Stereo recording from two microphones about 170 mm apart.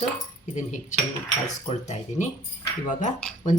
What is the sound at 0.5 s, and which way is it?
Speech, 45° left (ahead or behind).